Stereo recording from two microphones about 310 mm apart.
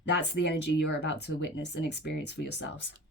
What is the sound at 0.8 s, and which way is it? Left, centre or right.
Speech, left.